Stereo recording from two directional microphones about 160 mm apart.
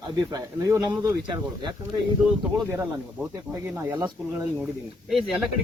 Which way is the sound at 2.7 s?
15° right (ahead or behind).